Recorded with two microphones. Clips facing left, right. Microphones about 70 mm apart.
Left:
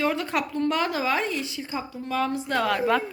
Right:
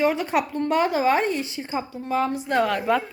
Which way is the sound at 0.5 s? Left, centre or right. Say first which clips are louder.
Right 2 dB; right.